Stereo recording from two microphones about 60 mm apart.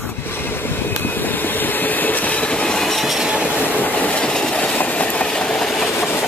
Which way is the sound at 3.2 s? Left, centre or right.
Centre.